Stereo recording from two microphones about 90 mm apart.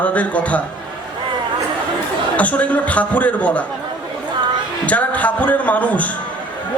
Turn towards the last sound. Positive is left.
turn(degrees=15)  # may be behind; listen again after turning